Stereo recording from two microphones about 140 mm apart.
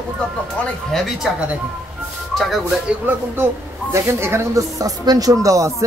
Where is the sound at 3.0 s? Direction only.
15° right (ahead or behind).